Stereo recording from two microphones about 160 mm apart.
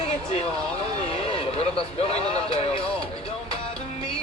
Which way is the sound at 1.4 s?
40° left (ahead or behind).